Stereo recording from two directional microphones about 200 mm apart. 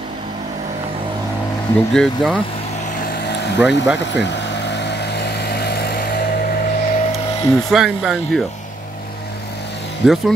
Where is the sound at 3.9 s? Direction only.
60° left (ahead or behind).